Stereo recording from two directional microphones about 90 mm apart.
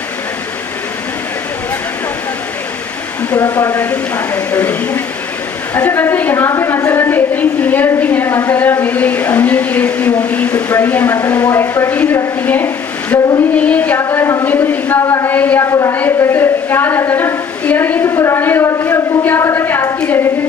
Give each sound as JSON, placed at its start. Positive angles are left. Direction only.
{"t": 3.5, "sound": "a woman's voice", "side_deg": 20}
{"t": 13.9, "sound": "a woman's voice", "side_deg": 25}
{"t": 15.6, "sound": "a woman's voice", "side_deg": 35}
{"t": 15.9, "sound": "a woman's voice", "side_deg": 25}